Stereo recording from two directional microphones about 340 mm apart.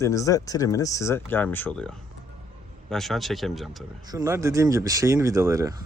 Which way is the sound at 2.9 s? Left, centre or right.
Centre.